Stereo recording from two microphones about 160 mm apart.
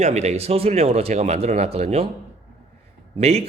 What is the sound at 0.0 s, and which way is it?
Speech, 45° right (ahead or behind).